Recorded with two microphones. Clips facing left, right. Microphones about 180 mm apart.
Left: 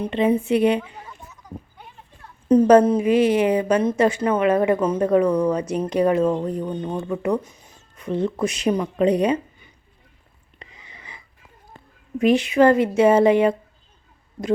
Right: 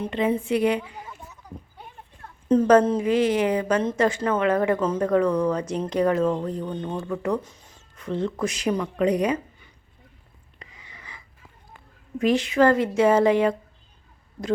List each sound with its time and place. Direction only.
0.0 s a woman's voice: 20° left (ahead or behind)
2.5 s speech: 15° left (ahead or behind)
10.6 s a sound: 20° left (ahead or behind)
12.2 s a woman's voice: 15° left (ahead or behind)